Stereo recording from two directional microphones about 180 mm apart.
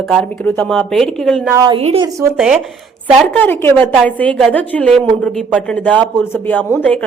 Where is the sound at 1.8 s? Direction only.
35° right (ahead or behind).